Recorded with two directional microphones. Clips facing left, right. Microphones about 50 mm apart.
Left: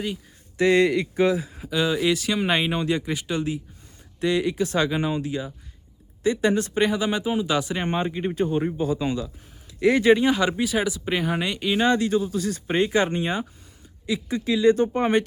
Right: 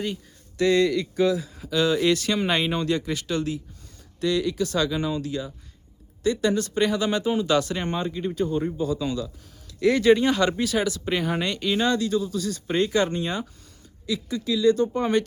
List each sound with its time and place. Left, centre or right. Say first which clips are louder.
0.5 s speech: left 2 dB; left
11.9 s speech: left 2 dB; left